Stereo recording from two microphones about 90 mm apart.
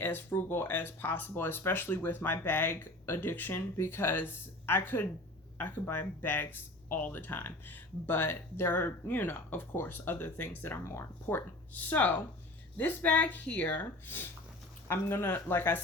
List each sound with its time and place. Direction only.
0.0 s speech: 25° left (ahead or behind)